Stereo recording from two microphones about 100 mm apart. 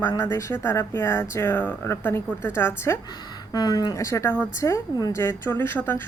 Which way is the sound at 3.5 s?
45° left (ahead or behind).